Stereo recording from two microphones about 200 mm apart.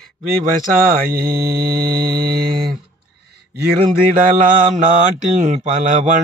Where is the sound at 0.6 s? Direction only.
45° right (ahead or behind).